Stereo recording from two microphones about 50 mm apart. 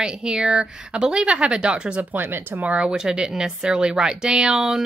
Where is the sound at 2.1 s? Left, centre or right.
Right.